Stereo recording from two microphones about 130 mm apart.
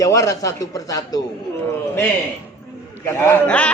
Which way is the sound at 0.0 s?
25° left (ahead or behind).